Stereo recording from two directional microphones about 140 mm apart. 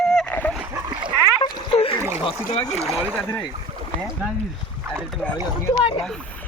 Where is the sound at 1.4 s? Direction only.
40° left (ahead or behind).